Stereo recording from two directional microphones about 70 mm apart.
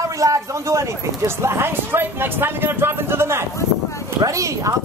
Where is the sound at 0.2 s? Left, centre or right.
Right.